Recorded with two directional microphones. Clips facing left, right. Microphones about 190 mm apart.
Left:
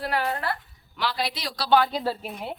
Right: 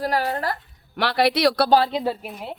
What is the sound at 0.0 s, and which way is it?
Speech, 40° right (ahead or behind).